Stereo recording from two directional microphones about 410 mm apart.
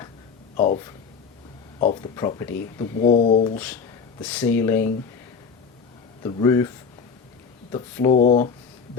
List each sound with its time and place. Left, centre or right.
0.5 s speech: centre
1.8 s speech: centre
6.2 s speech: centre